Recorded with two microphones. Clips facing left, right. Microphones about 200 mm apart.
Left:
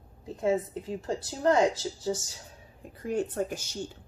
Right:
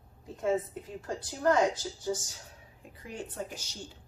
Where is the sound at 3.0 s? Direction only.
50° left (ahead or behind).